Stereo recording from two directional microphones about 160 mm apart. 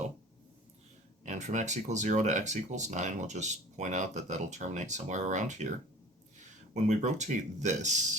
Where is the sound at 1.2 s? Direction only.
50° right (ahead or behind).